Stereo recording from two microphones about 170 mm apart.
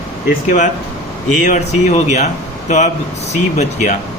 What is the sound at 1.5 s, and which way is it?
Speech, 45° left (ahead or behind).